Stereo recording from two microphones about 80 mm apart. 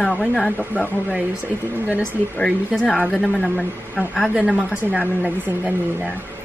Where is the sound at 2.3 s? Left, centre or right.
Centre.